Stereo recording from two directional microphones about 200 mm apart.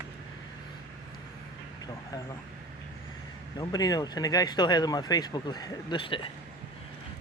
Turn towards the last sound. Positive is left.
turn(degrees=25)  # may be behind; listen again after turning